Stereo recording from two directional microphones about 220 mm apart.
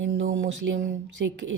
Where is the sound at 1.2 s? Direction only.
50° right (ahead or behind).